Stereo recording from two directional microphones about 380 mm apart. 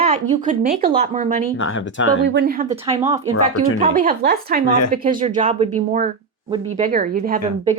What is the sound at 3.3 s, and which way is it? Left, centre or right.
Speech, left.